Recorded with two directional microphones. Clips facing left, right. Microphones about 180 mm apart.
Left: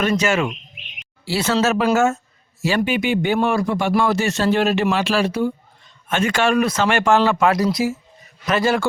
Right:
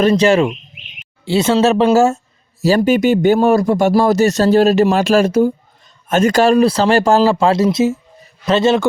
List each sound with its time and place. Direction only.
0.0 s speech: 35° right (ahead or behind)